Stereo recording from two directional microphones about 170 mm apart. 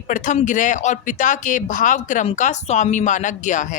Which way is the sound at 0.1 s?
45° left (ahead or behind).